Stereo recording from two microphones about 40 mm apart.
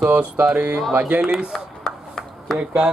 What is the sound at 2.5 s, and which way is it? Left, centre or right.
Speech, right.